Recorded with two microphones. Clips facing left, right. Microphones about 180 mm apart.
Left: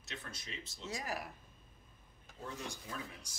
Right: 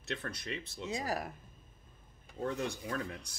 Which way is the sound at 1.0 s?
40° right (ahead or behind).